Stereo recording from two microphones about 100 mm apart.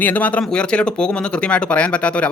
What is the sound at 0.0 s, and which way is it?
Speech, 15° left (ahead or behind).